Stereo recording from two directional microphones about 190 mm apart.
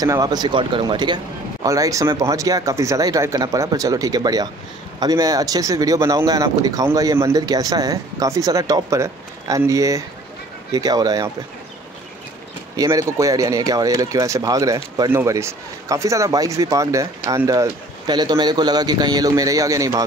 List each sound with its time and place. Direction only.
0.0 s a man's voice: 20° right (ahead or behind)
12.7 s a man's voice: 20° right (ahead or behind)